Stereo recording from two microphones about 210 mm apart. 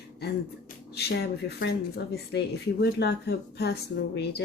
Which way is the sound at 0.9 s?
50° left (ahead or behind).